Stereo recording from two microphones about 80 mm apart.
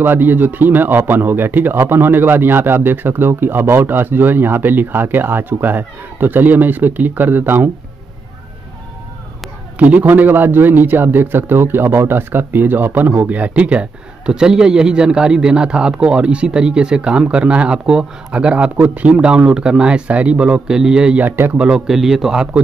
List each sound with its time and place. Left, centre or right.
0.0 s speech: right
9.8 s a man's voice: centre
21.2 s speech: right
21.6 s a man's voice: centre